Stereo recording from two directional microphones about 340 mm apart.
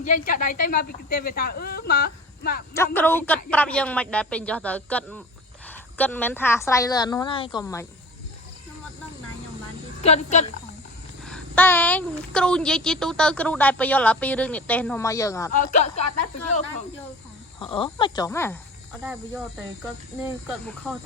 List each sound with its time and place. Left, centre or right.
0.0 s a woman's voice: left
2.7 s a woman's voice: centre
10.0 s a woman's voice: centre
11.2 s a woman's voice: centre
15.5 s a woman's voice: left
17.6 s a woman's voice: centre